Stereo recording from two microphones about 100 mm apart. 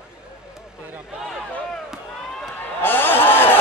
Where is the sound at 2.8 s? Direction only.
20° left (ahead or behind).